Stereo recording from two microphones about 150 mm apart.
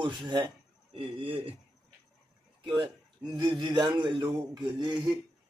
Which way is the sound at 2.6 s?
30° right (ahead or behind).